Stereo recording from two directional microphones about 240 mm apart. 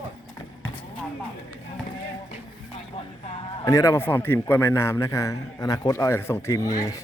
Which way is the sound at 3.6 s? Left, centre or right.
Centre.